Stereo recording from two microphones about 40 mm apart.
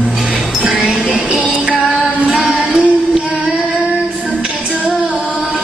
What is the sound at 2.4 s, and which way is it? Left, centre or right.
Music, centre.